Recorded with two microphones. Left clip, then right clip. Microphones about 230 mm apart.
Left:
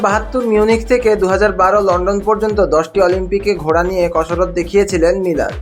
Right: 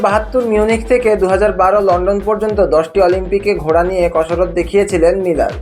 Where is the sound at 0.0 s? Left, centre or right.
Centre.